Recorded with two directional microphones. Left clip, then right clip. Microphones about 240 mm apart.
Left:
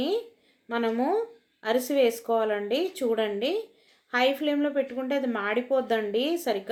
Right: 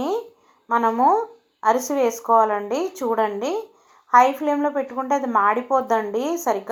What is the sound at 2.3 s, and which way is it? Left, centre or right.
A woman's voice, right.